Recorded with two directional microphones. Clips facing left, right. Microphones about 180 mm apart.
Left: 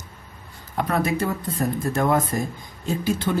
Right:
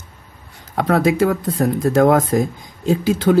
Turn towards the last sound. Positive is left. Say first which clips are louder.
# right 8 dB
turn(degrees=-90)